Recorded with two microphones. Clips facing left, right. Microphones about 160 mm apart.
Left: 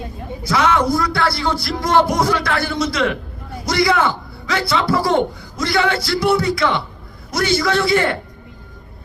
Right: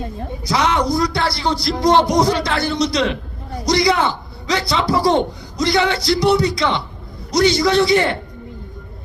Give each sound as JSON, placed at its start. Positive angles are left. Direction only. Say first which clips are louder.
{"t": 0.4, "sound": "a man's voice", "louder": "left 1 dB", "side_deg": -20}